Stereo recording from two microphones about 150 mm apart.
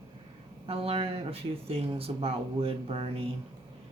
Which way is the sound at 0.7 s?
40° right (ahead or behind).